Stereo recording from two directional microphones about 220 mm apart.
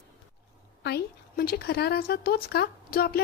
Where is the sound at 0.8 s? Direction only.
45° left (ahead or behind).